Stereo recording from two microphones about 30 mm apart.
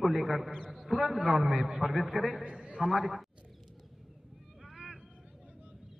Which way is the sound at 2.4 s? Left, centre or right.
Right.